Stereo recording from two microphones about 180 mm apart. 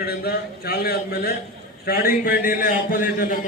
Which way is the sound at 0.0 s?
60° left (ahead or behind).